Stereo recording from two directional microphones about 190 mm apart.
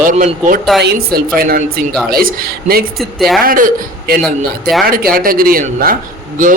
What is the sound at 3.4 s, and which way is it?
A man's voice, 50° right (ahead or behind).